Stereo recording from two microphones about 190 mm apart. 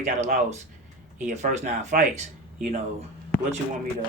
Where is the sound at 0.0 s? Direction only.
40° right (ahead or behind).